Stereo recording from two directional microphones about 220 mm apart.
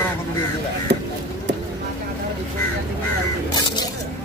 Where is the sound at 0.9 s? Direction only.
50° right (ahead or behind).